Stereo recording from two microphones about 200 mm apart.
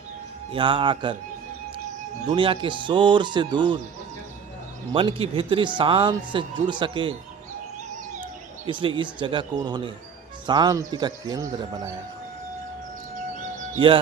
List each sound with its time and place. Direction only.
0.5 s speech: 25° right (ahead or behind)
2.3 s speech: 25° right (ahead or behind)
4.9 s speech: 25° right (ahead or behind)
8.6 s speech: 25° right (ahead or behind)
13.7 s speech: 25° right (ahead or behind)